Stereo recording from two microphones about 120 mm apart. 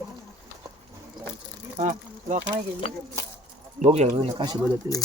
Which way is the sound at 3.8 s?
70° right (ahead or behind).